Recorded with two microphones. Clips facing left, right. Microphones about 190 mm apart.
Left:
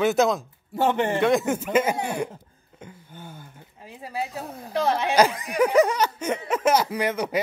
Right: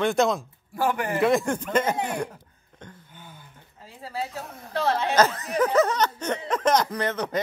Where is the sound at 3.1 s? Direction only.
45° left (ahead or behind).